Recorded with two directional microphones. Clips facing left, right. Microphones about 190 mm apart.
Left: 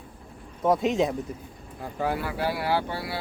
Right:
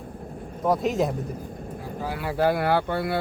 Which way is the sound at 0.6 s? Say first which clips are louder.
Even; centre (ahead or behind).